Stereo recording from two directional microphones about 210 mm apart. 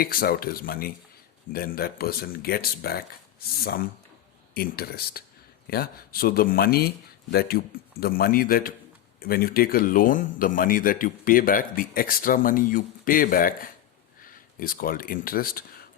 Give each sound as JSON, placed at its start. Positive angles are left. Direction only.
{"t": 0.0, "sound": "a man's voice", "side_deg": 45}